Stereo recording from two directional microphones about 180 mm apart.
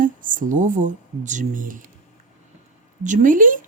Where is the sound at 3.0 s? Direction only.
45° right (ahead or behind).